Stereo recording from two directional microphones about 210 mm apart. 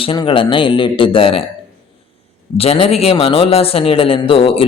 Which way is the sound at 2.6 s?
30° left (ahead or behind).